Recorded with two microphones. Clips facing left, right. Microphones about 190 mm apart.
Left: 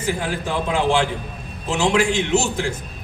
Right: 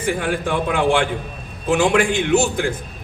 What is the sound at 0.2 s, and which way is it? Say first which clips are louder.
A man's voice: right 3 dB; 60° right (ahead or behind).